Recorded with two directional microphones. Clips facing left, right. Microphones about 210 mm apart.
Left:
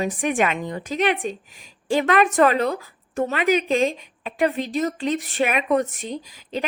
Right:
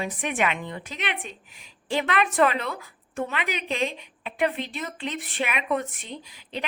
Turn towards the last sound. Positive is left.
turn(degrees=40)  # may be behind; listen again after turning